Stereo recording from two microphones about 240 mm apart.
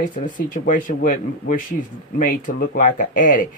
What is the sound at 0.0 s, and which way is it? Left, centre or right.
Speech, left.